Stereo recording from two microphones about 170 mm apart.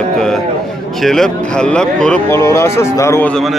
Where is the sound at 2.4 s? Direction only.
15° left (ahead or behind).